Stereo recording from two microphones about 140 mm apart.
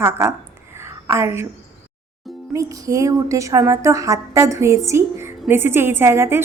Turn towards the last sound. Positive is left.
turn(degrees=-20)  # may be behind; listen again after turning